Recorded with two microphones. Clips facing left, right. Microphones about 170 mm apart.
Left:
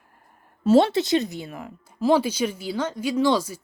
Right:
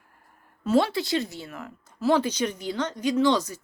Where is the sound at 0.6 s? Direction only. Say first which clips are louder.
Left 5 dB; 25° left (ahead or behind).